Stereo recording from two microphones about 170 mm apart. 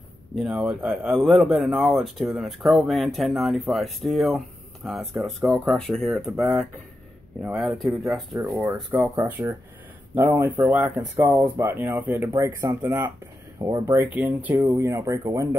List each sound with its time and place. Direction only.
0.4 s speech: 5° right (ahead or behind)
11.0 s speech: 15° right (ahead or behind)
13.9 s speech: 10° right (ahead or behind)